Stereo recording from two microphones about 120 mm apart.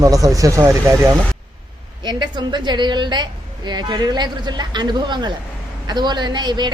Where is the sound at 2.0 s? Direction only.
40° right (ahead or behind).